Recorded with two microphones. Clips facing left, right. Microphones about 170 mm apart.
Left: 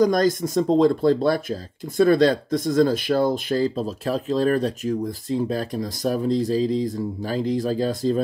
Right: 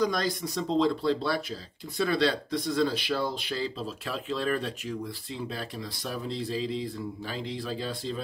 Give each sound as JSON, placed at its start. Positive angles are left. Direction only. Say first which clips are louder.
{"t": 0.0, "sound": "speech", "louder": "left 9 dB", "side_deg": 45}